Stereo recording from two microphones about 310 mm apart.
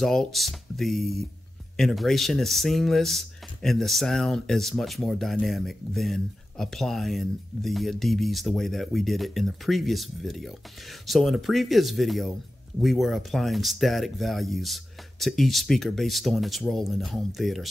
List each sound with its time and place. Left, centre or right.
0.0 s speech: centre